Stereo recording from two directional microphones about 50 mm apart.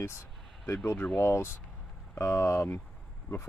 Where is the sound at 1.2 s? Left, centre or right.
Left.